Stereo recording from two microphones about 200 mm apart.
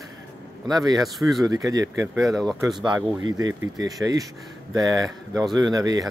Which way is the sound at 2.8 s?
20° right (ahead or behind).